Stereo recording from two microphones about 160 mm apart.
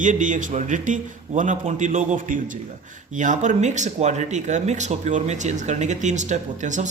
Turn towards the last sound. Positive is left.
turn(degrees=-50)  # may be behind; listen again after turning